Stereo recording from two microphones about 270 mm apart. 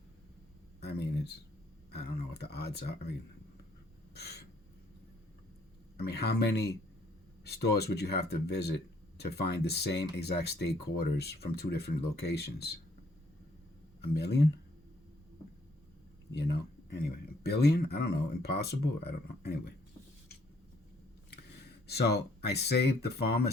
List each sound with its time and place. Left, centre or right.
0.8 s a sound: left
1.9 s speech: left
4.1 s speech: left
6.0 s speech: left
14.0 s speech: left
16.3 s speech: left
21.8 s speech: left